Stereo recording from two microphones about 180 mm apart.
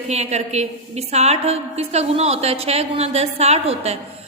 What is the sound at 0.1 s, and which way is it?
A woman's voice, 40° right (ahead or behind).